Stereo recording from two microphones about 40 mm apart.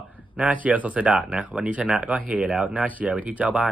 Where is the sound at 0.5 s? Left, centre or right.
Right.